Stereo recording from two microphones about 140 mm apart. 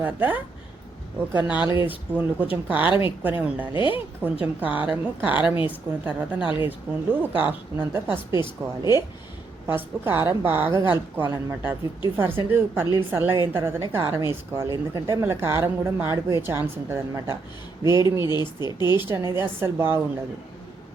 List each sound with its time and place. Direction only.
0.0 s a woman's voice: 15° right (ahead or behind)
1.9 s a woman's voice: 10° right (ahead or behind)
3.8 s speech: 35° left (ahead or behind)
4.2 s a woman's voice: 10° right (ahead or behind)
18.3 s speech: 30° left (ahead or behind)
19.0 s a woman's voice: 20° right (ahead or behind)